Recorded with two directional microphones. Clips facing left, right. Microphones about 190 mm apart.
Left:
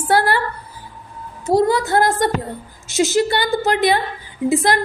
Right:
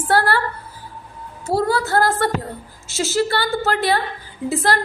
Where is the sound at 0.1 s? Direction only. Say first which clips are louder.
Left 1 dB; 15° left (ahead or behind).